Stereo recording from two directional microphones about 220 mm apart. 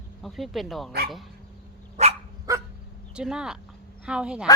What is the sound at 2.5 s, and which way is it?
Dog, 15° right (ahead or behind).